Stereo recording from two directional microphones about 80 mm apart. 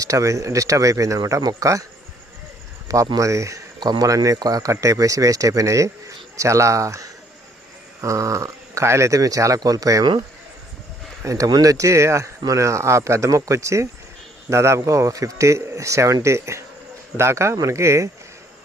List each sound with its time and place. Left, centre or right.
0.0 s speech: right
3.2 s speech: right
3.8 s speech: right
11.2 s speech: right